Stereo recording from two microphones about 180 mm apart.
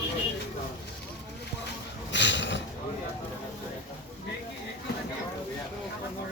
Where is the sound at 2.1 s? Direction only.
85° left.